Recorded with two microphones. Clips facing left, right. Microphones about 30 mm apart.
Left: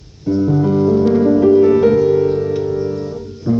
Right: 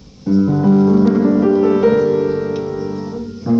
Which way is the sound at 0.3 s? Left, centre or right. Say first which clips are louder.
Right 1 dB; centre.